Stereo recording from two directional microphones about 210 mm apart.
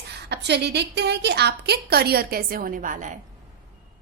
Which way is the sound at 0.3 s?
55° right (ahead or behind).